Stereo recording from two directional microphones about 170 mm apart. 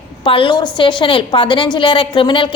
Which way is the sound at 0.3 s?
30° left (ahead or behind).